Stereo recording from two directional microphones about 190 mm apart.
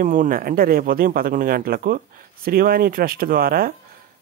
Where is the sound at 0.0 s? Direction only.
45° right (ahead or behind).